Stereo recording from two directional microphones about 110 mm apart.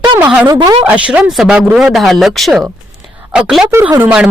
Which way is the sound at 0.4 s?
40° right (ahead or behind).